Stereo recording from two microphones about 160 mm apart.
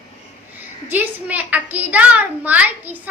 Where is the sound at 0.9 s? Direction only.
10° right (ahead or behind).